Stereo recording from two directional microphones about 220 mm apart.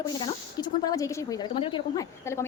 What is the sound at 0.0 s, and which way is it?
Speech, 20° left (ahead or behind).